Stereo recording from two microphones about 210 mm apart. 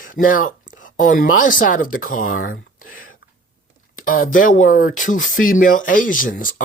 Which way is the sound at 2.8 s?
40° left (ahead or behind).